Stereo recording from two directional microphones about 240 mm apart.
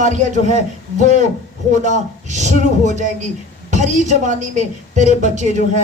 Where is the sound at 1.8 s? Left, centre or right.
Right.